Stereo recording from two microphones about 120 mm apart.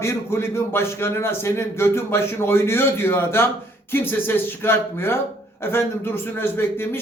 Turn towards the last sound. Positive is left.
turn(degrees=20)  # may be behind; listen again after turning